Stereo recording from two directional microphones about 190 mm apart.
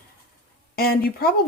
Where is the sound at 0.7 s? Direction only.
55° left (ahead or behind).